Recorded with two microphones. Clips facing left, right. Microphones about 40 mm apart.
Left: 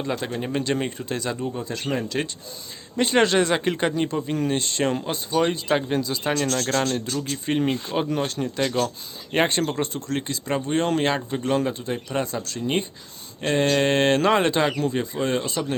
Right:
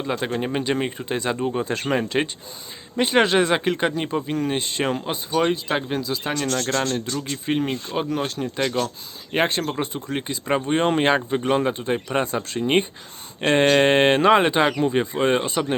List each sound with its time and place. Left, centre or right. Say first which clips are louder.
0.0 s speech: right 2 dB; centre
1.6 s speech: right 4 dB; right
2.9 s speech: right 1 dB; centre
8.5 s speech: even; centre; by 15.6 s right